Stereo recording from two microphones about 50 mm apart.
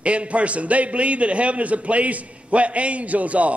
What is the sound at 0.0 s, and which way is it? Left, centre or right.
A man's voice, right.